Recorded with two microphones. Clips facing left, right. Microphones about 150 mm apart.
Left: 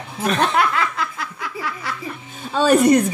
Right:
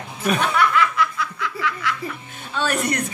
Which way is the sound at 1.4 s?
90° right.